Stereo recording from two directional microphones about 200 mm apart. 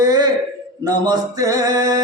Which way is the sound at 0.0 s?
20° right (ahead or behind).